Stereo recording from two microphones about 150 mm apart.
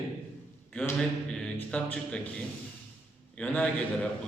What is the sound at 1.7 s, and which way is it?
Speech, 5° left (ahead or behind).